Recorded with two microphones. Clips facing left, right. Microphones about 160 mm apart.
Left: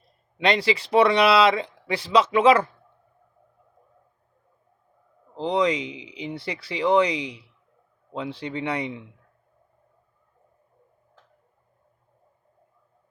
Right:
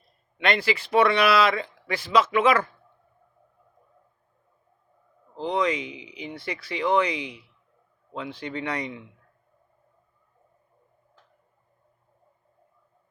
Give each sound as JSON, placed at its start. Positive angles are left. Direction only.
{"t": 0.4, "sound": "speech", "side_deg": 30}
{"t": 5.3, "sound": "speech", "side_deg": 30}